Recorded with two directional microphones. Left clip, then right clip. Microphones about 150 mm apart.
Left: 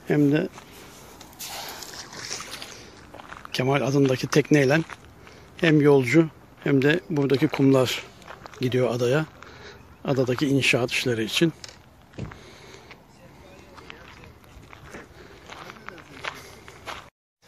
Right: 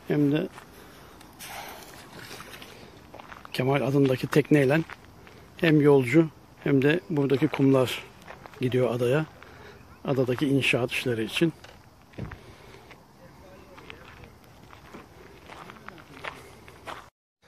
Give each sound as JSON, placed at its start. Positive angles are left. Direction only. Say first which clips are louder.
{"t": 0.1, "sound": "speech", "louder": "left 4 dB", "side_deg": 15}
{"t": 1.5, "sound": "a sound", "louder": "left 3 dB", "side_deg": -5}
{"t": 2.0, "sound": "boat", "louder": "left 7 dB", "side_deg": -40}
{"t": 2.7, "sound": "a sound", "louder": "left 3 dB", "side_deg": -5}
{"t": 5.6, "sound": "speech", "louder": "left 2 dB", "side_deg": 0}
{"t": 15.5, "sound": "walk", "louder": "left 4 dB", "side_deg": -5}